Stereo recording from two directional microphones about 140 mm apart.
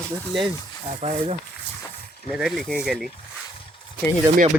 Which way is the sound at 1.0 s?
55° right (ahead or behind).